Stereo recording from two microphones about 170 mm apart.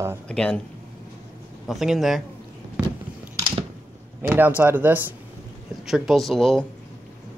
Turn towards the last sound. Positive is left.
turn(degrees=0)  # may be behind; listen again after turning